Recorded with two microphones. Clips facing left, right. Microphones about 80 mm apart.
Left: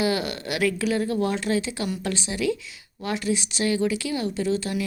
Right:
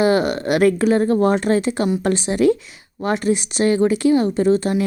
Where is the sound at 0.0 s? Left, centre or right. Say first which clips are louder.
Right 9 dB; right.